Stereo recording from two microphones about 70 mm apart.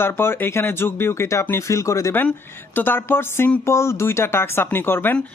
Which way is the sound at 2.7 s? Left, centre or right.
Left.